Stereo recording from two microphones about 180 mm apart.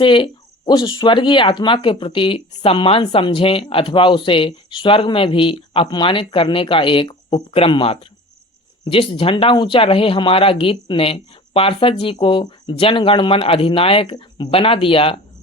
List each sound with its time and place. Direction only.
0.0 s speech: 25° left (ahead or behind)